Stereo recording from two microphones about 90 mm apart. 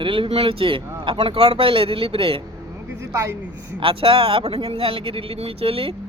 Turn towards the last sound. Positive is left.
turn(degrees=-90)